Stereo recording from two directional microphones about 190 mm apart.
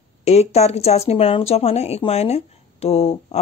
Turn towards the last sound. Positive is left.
turn(degrees=30)  # may be behind; listen again after turning